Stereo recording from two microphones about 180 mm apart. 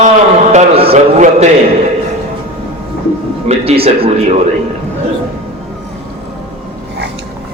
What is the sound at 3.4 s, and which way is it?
Speech, 30° right (ahead or behind).